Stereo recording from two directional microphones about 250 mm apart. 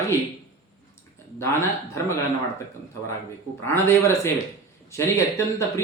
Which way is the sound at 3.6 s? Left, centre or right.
Centre.